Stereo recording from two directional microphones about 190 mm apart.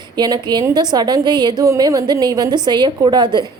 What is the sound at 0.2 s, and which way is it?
A woman's voice, 20° right (ahead or behind).